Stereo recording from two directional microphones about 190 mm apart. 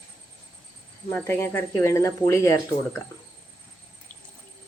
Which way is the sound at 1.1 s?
10° left (ahead or behind).